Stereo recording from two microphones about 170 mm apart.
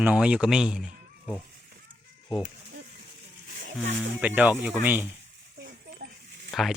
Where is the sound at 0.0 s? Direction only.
5° right (ahead or behind).